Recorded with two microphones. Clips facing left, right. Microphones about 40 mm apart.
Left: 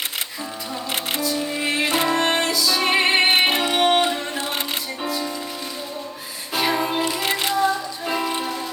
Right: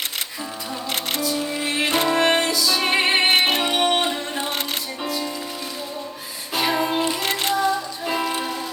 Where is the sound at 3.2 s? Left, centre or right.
Left.